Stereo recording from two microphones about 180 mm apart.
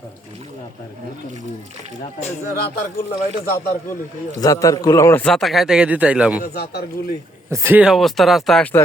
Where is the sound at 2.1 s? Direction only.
35° left (ahead or behind).